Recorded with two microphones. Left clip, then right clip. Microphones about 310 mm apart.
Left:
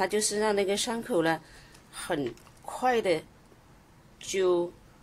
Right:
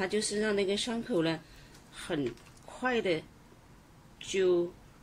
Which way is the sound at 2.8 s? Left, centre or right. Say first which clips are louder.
Left 5 dB; centre.